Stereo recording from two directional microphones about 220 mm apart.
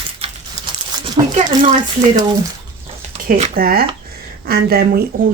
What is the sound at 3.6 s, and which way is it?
Speech, 45° right (ahead or behind).